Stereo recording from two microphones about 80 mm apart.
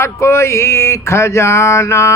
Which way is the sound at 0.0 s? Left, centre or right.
Left.